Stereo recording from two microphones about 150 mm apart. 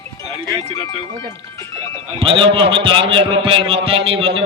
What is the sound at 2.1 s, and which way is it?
A man's voice, 35° right (ahead or behind).